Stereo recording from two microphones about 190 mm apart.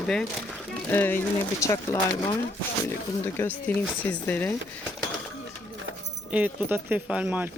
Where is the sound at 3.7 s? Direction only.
10° left (ahead or behind).